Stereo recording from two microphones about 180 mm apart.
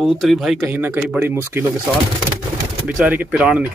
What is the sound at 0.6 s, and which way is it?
Speech, 10° right (ahead or behind).